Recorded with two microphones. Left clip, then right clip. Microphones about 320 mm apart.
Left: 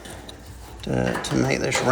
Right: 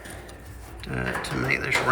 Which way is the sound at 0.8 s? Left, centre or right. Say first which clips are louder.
Left 4 dB; centre.